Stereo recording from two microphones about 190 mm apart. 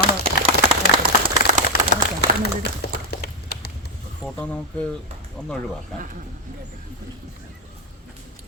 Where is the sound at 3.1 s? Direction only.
55° left (ahead or behind).